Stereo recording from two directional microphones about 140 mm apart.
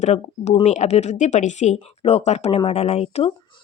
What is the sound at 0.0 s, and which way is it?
A woman's voice, 50° left (ahead or behind).